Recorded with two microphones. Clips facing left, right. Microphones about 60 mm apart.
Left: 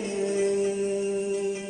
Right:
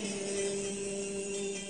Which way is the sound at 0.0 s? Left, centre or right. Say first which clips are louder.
Left 9 dB; left.